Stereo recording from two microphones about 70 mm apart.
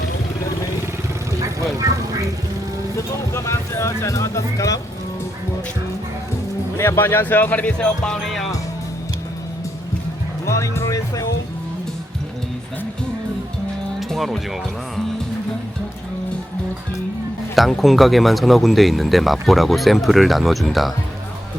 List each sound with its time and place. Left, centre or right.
1.4 s vehicle: right
3.3 s music: left
6.7 s speech: left; by 8.2 s centre
10.4 s music: left
14.1 s speech: centre
17.5 s speech: centre